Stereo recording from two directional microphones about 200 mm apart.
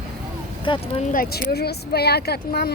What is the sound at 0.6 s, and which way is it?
Speech, 25° left (ahead or behind).